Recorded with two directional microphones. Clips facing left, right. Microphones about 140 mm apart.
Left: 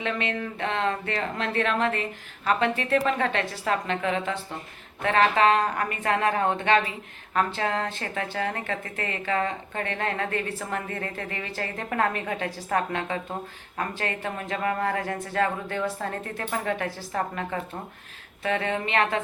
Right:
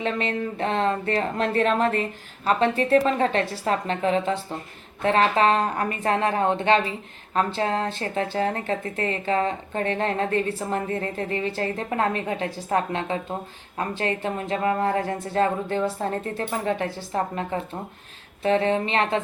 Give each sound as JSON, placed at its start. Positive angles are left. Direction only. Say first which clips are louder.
{"t": 0.0, "sound": "speech", "louder": "right 3 dB", "side_deg": -35}